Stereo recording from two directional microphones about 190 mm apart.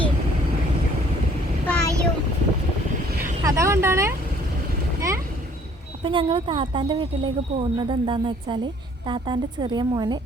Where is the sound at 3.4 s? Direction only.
15° right (ahead or behind).